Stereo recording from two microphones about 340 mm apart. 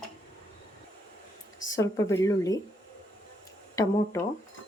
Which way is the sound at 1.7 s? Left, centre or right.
Centre.